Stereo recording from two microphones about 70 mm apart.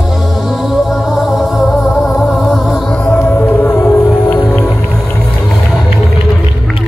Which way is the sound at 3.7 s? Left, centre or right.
Left.